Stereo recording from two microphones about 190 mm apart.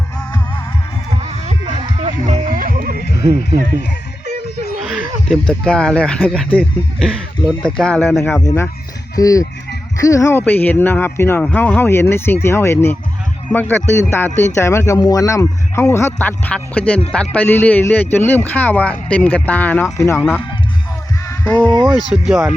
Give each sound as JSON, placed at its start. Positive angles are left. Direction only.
{"t": 1.2, "sound": "music", "side_deg": -35}
{"t": 3.2, "sound": "speech", "side_deg": -15}
{"t": 4.9, "sound": "speech", "side_deg": 0}
{"t": 9.1, "sound": "speech", "side_deg": 20}
{"t": 21.2, "sound": "a sound", "side_deg": 10}
{"t": 22.1, "sound": "speech", "side_deg": -5}